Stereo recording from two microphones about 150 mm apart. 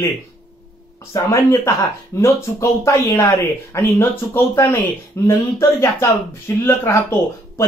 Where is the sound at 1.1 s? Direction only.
20° left (ahead or behind).